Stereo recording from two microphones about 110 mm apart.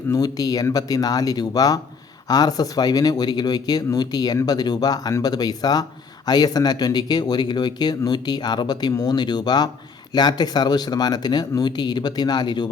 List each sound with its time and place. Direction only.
0.1 s speech: 35° left (ahead or behind)